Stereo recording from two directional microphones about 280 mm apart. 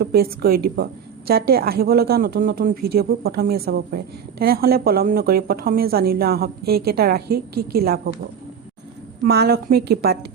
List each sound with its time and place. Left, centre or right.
0.0 s a woman's voice: right
9.2 s a woman's voice: right